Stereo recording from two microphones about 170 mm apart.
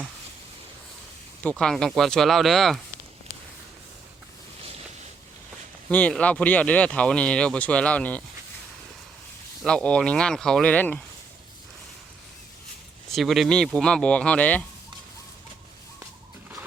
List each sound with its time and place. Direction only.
1.4 s speech: 5° left (ahead or behind)
5.9 s speech: 10° left (ahead or behind)
9.6 s speech: 5° left (ahead or behind)
13.1 s speech: centre (ahead or behind)